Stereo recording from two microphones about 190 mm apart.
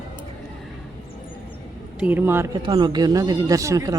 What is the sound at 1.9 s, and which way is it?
Speech, 10° right (ahead or behind).